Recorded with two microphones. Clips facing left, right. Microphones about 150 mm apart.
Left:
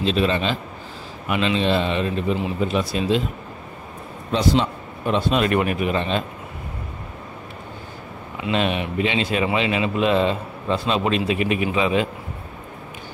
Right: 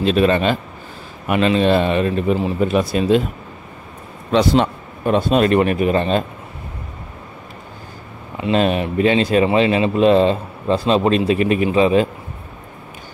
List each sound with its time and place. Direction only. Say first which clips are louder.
0.0 s speech: right 5 dB; 55° right (ahead or behind)
4.3 s a man's voice: right 5 dB; 70° right (ahead or behind)
5.0 s speech: right 5 dB; 45° right (ahead or behind)
8.5 s speech: right 5 dB; 40° right (ahead or behind)